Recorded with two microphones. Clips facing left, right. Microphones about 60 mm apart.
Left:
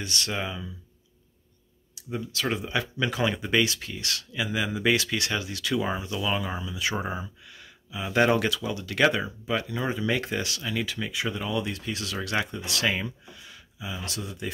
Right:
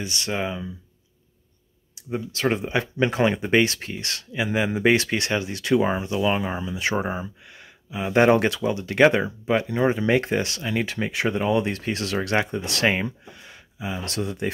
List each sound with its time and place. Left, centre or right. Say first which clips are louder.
0.0 s speech: right 3 dB; right
2.0 s speech: right 3 dB; right
4.5 s speech: right 5 dB; right